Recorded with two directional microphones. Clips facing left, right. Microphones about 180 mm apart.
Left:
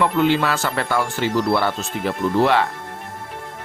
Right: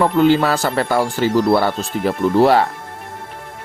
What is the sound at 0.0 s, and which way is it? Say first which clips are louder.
Speech: right 4 dB; 40° right (ahead or behind).